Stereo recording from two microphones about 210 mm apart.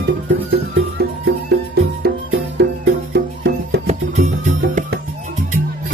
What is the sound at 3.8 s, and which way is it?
Music, 35° right (ahead or behind).